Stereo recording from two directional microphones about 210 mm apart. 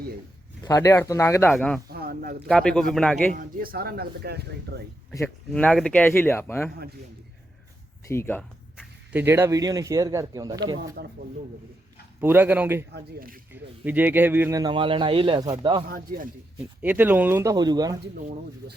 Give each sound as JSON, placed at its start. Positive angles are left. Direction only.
{"t": 0.6, "sound": "speech", "side_deg": 15}
{"t": 1.9, "sound": "a sound", "side_deg": -45}
{"t": 2.5, "sound": "speech", "side_deg": 5}
{"t": 3.3, "sound": "speech", "side_deg": -45}
{"t": 5.5, "sound": "speech", "side_deg": 5}
{"t": 8.0, "sound": "speech", "side_deg": 10}
{"t": 8.7, "sound": "speech", "side_deg": -5}
{"t": 12.2, "sound": "speech", "side_deg": -10}
{"t": 12.9, "sound": "speech", "side_deg": -45}
{"t": 13.5, "sound": "speech", "side_deg": -10}
{"t": 15.9, "sound": "a man's voice", "side_deg": -40}
{"t": 16.8, "sound": "speech", "side_deg": -10}